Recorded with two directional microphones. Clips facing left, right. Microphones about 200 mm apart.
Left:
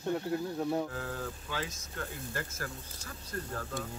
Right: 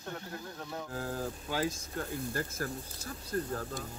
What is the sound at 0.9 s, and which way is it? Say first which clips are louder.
Speech: right 2 dB; 35° right (ahead or behind).